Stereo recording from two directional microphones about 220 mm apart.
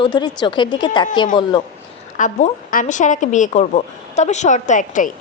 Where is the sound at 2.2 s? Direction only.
35° left (ahead or behind).